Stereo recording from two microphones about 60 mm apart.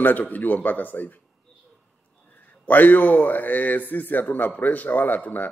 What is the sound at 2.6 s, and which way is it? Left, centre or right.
A man's voice, left.